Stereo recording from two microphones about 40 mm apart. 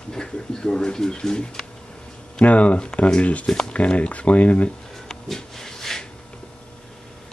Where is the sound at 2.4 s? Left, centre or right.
Left.